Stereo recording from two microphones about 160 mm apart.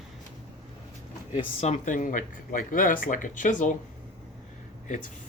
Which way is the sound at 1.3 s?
40° left (ahead or behind).